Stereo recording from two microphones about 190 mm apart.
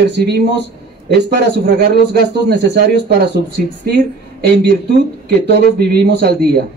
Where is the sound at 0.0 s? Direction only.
65° right (ahead or behind).